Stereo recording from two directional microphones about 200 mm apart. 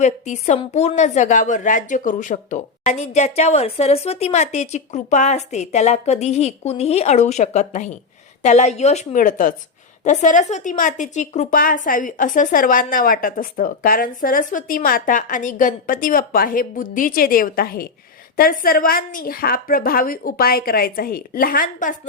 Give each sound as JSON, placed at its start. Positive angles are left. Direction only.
{"t": 0.0, "sound": "a woman's voice", "side_deg": 35}